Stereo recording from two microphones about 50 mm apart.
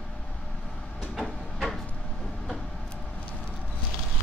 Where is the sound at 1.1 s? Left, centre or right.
Centre.